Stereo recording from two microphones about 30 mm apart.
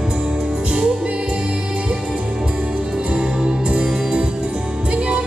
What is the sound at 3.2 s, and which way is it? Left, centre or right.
Music, right.